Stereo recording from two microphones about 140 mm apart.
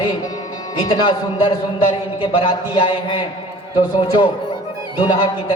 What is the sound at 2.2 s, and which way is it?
Music, 40° left (ahead or behind).